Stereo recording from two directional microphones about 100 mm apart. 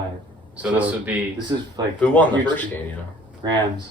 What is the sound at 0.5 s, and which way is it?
Speech, 15° right (ahead or behind).